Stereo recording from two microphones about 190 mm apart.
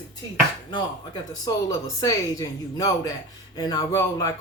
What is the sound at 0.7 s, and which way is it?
Speech, 25° left (ahead or behind).